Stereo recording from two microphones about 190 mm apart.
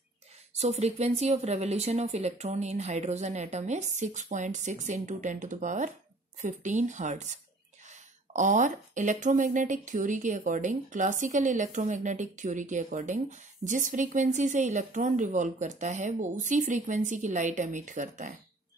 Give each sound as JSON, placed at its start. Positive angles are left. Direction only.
{"t": 0.6, "sound": "speech", "side_deg": -35}